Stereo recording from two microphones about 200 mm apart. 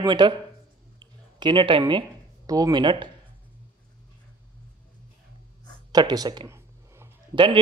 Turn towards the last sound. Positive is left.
turn(degrees=-25)  # may be behind; listen again after turning